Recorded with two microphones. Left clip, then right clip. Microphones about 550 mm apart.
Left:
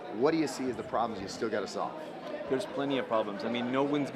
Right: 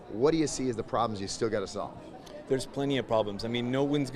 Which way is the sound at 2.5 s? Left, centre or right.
Right.